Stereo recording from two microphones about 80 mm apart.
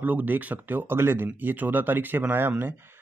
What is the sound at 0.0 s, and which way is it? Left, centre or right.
Speech, right.